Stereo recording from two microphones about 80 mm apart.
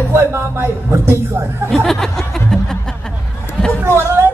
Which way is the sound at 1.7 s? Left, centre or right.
Centre.